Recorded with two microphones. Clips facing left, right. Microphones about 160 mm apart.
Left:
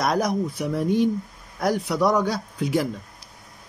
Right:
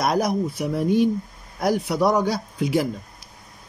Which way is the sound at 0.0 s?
10° right (ahead or behind).